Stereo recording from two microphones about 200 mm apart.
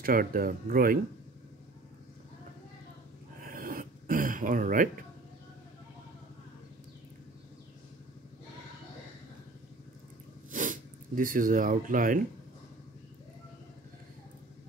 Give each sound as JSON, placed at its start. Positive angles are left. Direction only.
{"t": 0.0, "sound": "speech", "side_deg": -45}
{"t": 3.4, "sound": "a sound", "side_deg": -45}
{"t": 10.5, "sound": "speech", "side_deg": -40}